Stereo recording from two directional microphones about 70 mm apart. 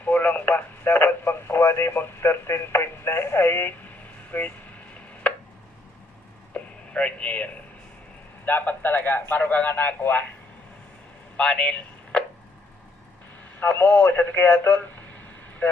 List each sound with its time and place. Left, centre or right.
0.0 s speech: left
5.2 s tick: centre
6.5 s radio: centre
8.4 s speech: left
9.3 s speech: left
11.3 s a sound: centre
13.6 s speech: left